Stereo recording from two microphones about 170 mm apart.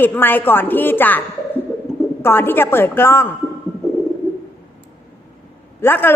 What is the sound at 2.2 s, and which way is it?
A woman's voice, 15° left (ahead or behind).